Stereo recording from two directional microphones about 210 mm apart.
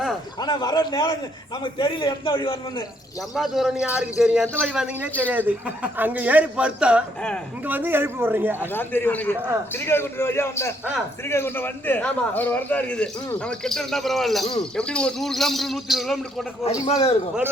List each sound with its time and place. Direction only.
0.3 s a man's voice: 20° left (ahead or behind)
3.3 s a man's voice: centre (ahead or behind)
8.7 s a man's voice: 10° left (ahead or behind)
16.8 s a man's voice: 25° left (ahead or behind)